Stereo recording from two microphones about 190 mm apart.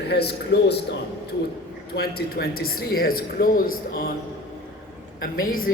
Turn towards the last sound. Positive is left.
turn(degrees=50)  # may be behind; listen again after turning